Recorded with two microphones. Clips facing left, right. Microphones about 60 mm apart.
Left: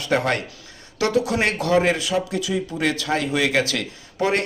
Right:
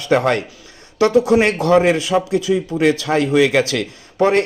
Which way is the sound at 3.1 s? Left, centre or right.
Right.